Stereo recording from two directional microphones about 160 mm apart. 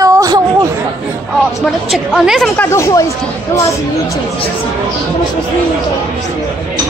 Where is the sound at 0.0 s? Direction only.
20° right (ahead or behind).